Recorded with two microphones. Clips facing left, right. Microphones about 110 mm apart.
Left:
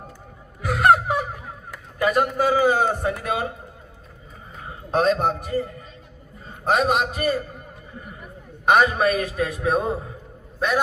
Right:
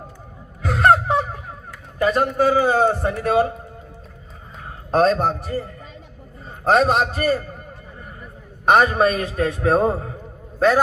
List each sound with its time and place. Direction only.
0.7 s gasp: 30° right (ahead or behind)
2.0 s a man's voice: 30° right (ahead or behind)
4.9 s a man's voice: 40° right (ahead or behind)
6.7 s a man's voice: 35° right (ahead or behind)
8.6 s a man's voice: 25° right (ahead or behind)